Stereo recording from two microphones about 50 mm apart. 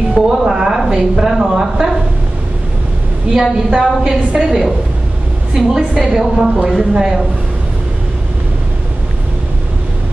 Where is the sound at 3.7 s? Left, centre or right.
Centre.